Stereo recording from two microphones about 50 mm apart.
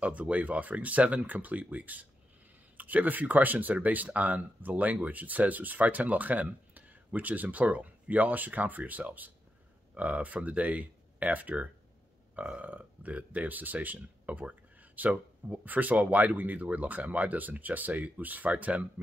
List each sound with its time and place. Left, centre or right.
0.0 s speech: right